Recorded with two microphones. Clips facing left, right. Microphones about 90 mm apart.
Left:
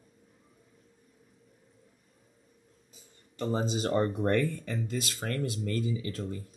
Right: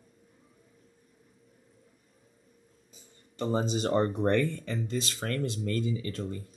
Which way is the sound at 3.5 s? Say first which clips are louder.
Right 2 dB; 35° right (ahead or behind).